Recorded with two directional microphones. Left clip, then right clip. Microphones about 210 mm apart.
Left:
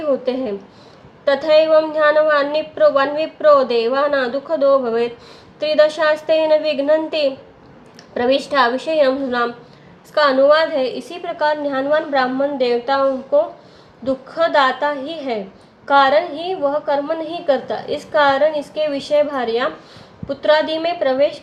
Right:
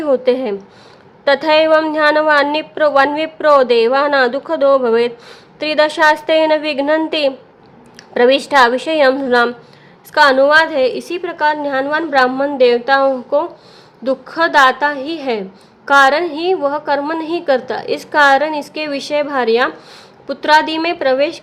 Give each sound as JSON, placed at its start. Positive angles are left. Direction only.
{"t": 0.0, "sound": "a woman's voice", "side_deg": -30}